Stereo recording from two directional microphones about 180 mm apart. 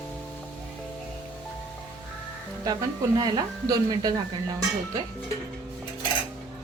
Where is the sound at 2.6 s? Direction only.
20° right (ahead or behind).